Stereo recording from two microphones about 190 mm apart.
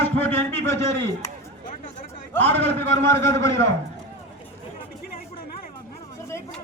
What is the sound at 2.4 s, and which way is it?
A man's voice, 10° left (ahead or behind).